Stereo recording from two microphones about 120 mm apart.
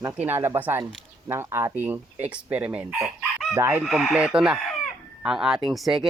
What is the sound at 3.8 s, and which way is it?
Speech, centre (ahead or behind).